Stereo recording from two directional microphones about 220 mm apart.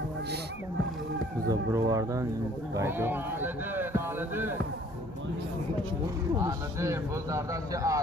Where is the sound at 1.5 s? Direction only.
15° right (ahead or behind).